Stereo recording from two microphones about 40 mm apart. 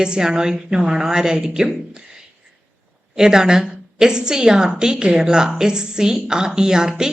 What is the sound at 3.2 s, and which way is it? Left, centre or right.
A woman's voice, centre.